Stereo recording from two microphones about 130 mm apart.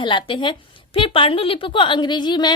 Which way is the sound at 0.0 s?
40° left (ahead or behind).